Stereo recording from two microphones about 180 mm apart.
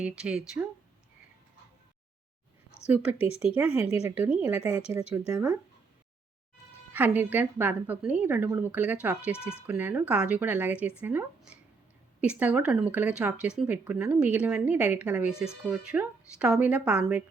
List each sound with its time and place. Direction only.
0.0 s speech: 5° right (ahead or behind)
2.8 s a woman's voice: 10° right (ahead or behind)
3.8 s speech: 35° left (ahead or behind)
4.1 s a woman's voice: 10° right (ahead or behind)
6.9 s a woman's voice: 10° right (ahead or behind)